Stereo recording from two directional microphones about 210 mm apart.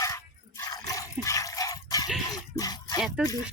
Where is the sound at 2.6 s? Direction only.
15° left (ahead or behind).